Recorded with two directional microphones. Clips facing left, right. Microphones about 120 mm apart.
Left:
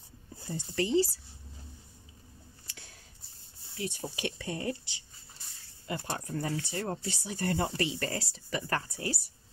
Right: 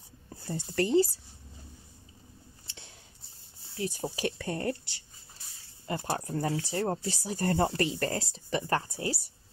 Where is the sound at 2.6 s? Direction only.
25° right (ahead or behind).